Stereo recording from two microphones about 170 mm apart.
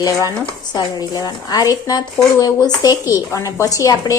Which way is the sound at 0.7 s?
25° left (ahead or behind).